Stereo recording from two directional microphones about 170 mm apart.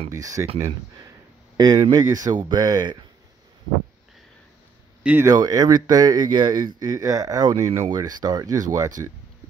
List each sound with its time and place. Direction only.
0.1 s speech: 20° right (ahead or behind)
1.6 s speech: 20° right (ahead or behind)
5.0 s speech: 10° right (ahead or behind)
5.3 s speech: 20° right (ahead or behind)